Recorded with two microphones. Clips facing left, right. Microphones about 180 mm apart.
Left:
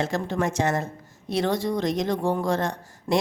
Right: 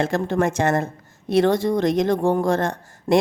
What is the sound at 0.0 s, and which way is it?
Speech, 55° right (ahead or behind).